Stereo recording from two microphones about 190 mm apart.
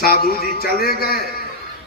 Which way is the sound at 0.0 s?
50° left (ahead or behind).